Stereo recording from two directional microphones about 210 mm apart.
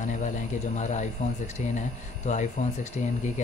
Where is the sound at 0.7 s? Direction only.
35° left (ahead or behind).